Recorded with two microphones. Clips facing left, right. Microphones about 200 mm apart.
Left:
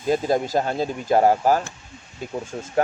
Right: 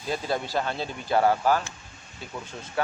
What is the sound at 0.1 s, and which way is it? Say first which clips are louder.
Speech: left 8 dB; 45° left (ahead or behind).